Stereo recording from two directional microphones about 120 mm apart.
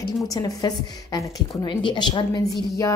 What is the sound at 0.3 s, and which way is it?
A woman's voice, 30° left (ahead or behind).